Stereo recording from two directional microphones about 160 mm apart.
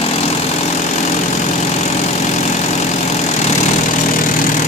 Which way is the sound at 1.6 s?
45° left (ahead or behind).